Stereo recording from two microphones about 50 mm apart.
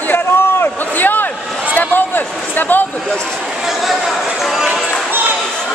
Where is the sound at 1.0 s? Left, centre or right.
Left.